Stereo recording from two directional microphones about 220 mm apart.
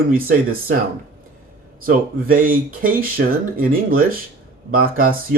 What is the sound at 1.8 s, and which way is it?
Speech, 40° right (ahead or behind).